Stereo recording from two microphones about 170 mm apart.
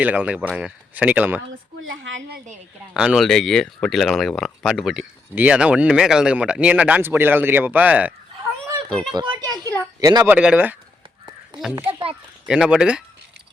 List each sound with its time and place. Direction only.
0.0 s speech: 10° right (ahead or behind)
2.9 s speech: 5° right (ahead or behind)
9.1 s a woman's voice: 25° right (ahead or behind)
10.2 s speech: 5° right (ahead or behind)